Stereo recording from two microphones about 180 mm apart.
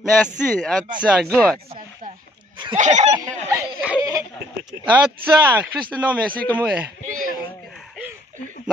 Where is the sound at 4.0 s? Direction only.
20° right (ahead or behind).